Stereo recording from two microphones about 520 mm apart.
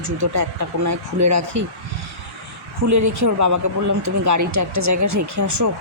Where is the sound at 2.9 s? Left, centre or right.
Right.